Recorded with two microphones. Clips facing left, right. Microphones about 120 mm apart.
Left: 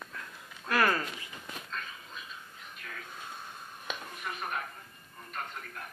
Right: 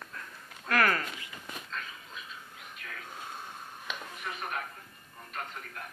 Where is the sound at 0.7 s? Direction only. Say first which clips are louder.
Even; 20° left (ahead or behind).